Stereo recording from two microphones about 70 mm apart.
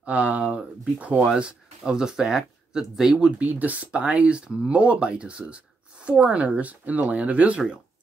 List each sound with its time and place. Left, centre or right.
0.0 s speech: centre
1.2 s speech: centre